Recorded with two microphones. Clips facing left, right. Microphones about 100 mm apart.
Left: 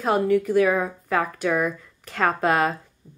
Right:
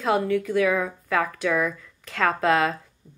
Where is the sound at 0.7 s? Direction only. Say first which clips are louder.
Left 1 dB; 35° left (ahead or behind).